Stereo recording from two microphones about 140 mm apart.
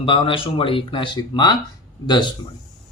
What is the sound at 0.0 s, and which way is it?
Speech, 35° left (ahead or behind).